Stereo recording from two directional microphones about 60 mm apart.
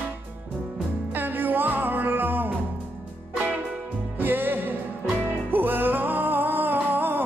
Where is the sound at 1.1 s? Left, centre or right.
Right.